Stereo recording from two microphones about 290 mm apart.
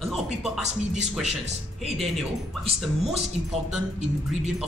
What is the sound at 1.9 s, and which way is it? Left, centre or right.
Speech, centre.